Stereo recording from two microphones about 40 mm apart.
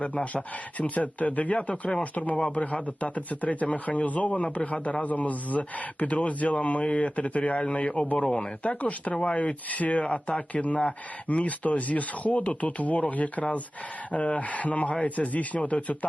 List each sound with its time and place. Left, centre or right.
0.0 s speech: left
8.2 s speech: left
8.8 s speech: left